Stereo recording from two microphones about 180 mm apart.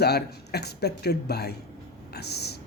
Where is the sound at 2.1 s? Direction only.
65° left (ahead or behind).